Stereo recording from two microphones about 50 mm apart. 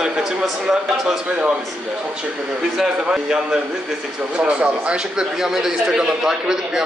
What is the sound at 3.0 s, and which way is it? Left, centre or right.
A man's voice, centre.